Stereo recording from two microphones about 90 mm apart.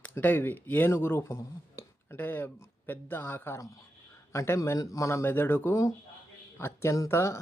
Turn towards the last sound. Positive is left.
turn(degrees=30)  # may be behind; listen again after turning